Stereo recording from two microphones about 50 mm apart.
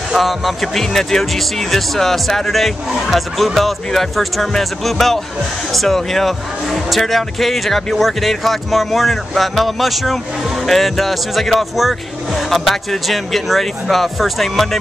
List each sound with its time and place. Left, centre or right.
0.1 s speech: centre